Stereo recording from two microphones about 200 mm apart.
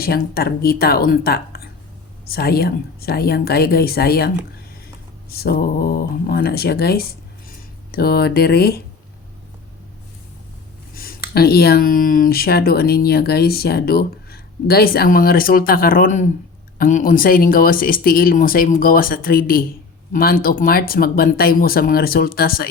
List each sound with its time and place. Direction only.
0.0 s speech: 50° left (ahead or behind)
5.3 s speech: 50° left (ahead or behind)
10.9 s speech: 45° left (ahead or behind)